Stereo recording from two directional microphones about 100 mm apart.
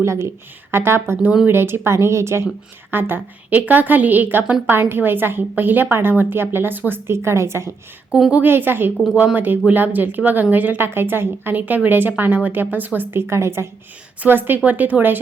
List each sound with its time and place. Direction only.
0.0 s a woman's voice: 30° right (ahead or behind)
8.1 s a woman's voice: 10° right (ahead or behind)